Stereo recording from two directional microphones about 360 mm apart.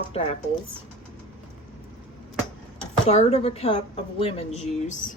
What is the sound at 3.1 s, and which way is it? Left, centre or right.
Speech, centre.